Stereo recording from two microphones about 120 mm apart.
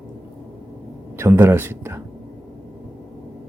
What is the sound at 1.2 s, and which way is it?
Speech, 20° right (ahead or behind).